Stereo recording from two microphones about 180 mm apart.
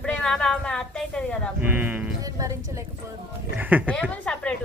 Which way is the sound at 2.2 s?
20° right (ahead or behind).